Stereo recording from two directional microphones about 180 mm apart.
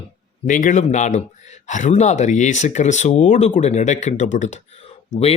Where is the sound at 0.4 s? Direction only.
45° left (ahead or behind).